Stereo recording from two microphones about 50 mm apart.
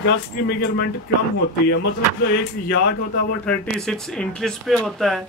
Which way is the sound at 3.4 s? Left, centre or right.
Left.